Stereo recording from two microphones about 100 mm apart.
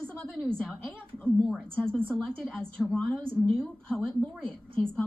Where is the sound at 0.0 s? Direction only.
10° left (ahead or behind).